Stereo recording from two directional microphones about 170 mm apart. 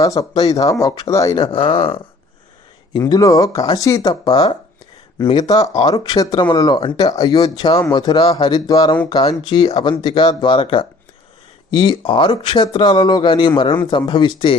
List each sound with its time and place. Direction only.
0.0 s speech: 20° left (ahead or behind)
1.5 s speech: 35° left (ahead or behind)
2.9 s speech: 20° left (ahead or behind)